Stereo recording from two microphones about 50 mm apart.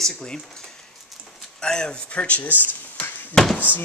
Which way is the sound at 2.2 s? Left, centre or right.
Left.